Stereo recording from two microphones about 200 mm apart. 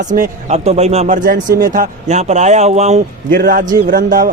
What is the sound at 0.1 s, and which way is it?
Speech, 35° right (ahead or behind).